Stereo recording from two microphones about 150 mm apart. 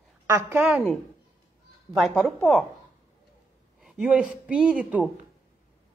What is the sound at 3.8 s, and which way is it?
Speech, 5° right (ahead or behind).